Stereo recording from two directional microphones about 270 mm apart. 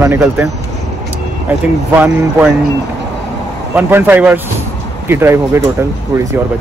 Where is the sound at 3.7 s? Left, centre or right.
Centre.